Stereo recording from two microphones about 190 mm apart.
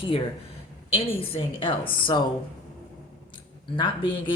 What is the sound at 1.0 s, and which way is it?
Speech, 25° left (ahead or behind).